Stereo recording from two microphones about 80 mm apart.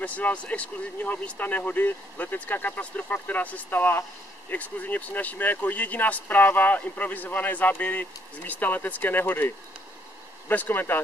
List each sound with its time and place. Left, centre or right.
0.0 s speech: centre
10.5 s speech: left